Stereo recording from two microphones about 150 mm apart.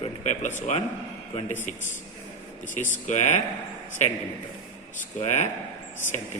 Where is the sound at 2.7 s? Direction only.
55° left (ahead or behind).